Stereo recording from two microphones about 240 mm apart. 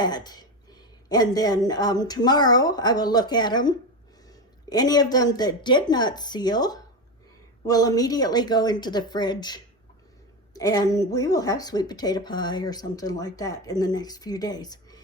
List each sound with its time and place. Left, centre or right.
0.0 s speech: centre